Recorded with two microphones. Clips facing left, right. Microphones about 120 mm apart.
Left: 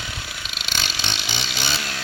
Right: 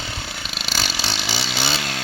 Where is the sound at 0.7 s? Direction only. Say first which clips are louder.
Right 3 dB; 35° right (ahead or behind).